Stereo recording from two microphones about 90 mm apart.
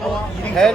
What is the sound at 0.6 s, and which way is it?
Speech, 10° left (ahead or behind).